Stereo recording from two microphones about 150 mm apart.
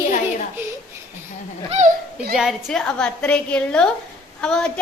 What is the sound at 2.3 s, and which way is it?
A woman's voice, centre (ahead or behind).